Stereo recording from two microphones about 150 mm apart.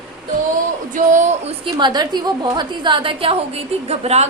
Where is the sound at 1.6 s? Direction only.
30° right (ahead or behind).